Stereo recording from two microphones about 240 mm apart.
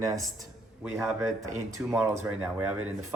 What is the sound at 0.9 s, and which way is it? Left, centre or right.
Speech, centre.